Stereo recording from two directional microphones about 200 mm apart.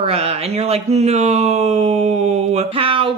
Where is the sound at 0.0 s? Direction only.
30° right (ahead or behind).